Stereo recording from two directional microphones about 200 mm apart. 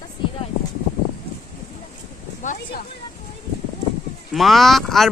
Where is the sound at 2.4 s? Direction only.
40° left (ahead or behind).